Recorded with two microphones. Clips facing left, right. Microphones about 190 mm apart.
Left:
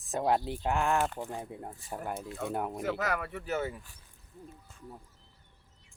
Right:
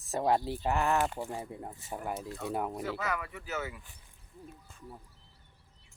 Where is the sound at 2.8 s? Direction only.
50° left (ahead or behind).